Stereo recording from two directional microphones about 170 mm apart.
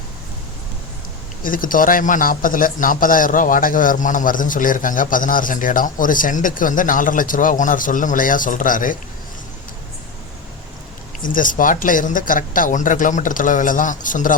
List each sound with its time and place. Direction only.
1.4 s speech: 55° left (ahead or behind)
11.2 s speech: 50° left (ahead or behind)